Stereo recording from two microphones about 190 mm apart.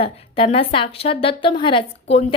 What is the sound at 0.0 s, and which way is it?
A woman's voice, 30° left (ahead or behind).